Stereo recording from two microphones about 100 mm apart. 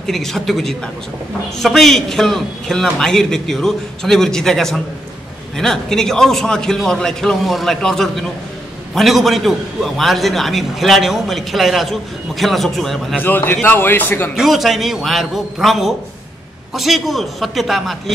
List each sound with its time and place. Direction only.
0.0 s a man's voice: 5° left (ahead or behind)
13.2 s a man's voice: 20° left (ahead or behind)
14.3 s a man's voice: centre (ahead or behind)